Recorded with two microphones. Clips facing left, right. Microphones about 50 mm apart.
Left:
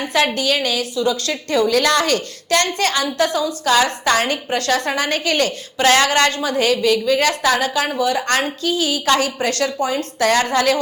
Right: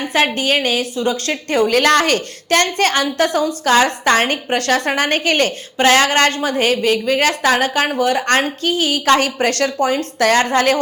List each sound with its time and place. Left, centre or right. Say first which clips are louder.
0.3 s a woman's voice: right 2 dB; right
9.2 s a woman's voice: right 3 dB; right